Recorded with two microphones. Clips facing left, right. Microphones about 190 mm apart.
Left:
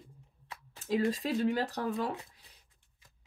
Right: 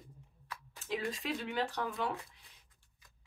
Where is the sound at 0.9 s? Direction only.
40° left (ahead or behind).